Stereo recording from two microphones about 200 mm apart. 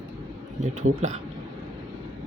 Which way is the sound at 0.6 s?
35° right (ahead or behind).